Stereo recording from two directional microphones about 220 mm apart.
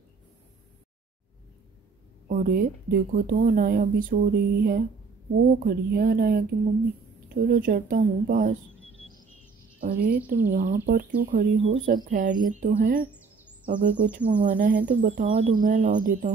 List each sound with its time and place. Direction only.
2.2 s speech: 40° right (ahead or behind)
9.8 s a woman's voice: 40° right (ahead or behind)